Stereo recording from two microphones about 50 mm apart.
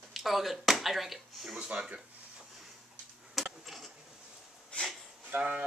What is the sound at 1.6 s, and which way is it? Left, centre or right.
Speech, centre.